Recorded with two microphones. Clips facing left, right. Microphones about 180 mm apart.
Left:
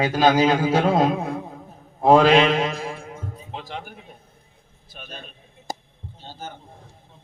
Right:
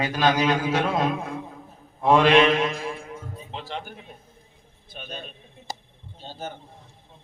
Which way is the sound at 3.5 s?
10° left (ahead or behind).